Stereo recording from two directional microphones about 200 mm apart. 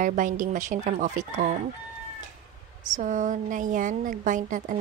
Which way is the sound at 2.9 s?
40° right (ahead or behind).